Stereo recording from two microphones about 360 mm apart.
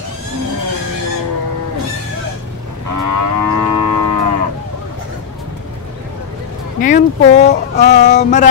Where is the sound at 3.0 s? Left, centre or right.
Right.